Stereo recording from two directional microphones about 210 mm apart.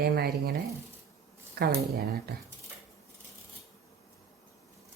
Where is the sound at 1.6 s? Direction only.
45° right (ahead or behind).